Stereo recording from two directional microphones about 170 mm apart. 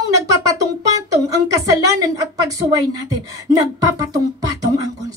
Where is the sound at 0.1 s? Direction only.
20° right (ahead or behind).